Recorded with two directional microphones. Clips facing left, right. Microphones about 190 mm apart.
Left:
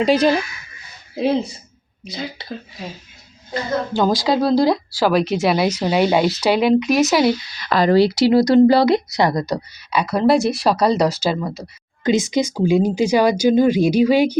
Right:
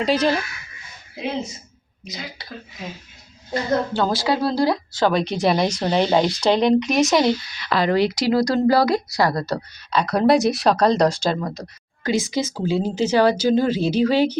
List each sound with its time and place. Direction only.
0.0 s speech: 15° left (ahead or behind)
1.1 s speech: 35° left (ahead or behind)
3.9 s speech: 15° left (ahead or behind)
7.6 s speech: 40° left (ahead or behind); by 11.6 s 5° left (ahead or behind)
12.0 s speech: 20° left (ahead or behind)